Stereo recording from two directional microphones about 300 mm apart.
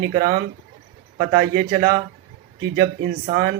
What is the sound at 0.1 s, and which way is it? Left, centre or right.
Speech, right.